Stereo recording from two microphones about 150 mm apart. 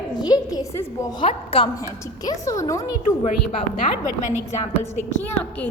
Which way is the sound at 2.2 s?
20° left (ahead or behind).